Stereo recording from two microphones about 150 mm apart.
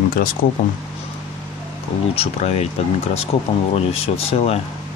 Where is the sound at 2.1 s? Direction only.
40° left (ahead or behind).